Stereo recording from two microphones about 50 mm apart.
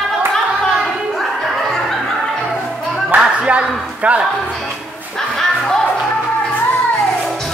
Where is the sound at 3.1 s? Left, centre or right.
Right.